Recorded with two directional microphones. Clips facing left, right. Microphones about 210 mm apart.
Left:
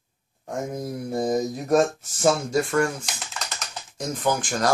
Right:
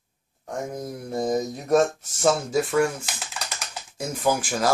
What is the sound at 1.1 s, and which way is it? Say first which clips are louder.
Speech: left 1 dB; 5° left (ahead or behind).